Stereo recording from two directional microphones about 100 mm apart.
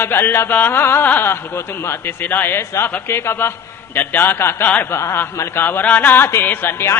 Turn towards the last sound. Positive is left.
turn(degrees=20)  # may be behind; listen again after turning